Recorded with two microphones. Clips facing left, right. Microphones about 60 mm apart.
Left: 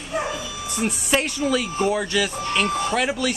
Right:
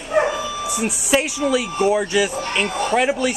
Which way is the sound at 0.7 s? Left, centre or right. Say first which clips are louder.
Right 2 dB; centre.